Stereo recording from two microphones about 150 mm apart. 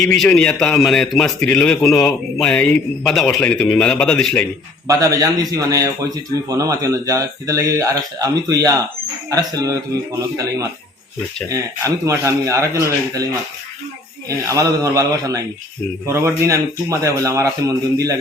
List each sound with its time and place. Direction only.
0.0 s a man's voice: 5° left (ahead or behind)
4.9 s speech: 20° right (ahead or behind)
11.4 s speech: 20° right (ahead or behind)
14.3 s speech: 20° right (ahead or behind)